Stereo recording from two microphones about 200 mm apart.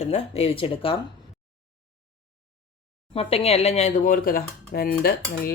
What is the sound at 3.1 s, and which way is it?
Speech, 30° left (ahead or behind).